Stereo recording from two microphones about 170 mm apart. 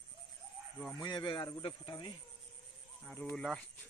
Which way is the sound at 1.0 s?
25° left (ahead or behind).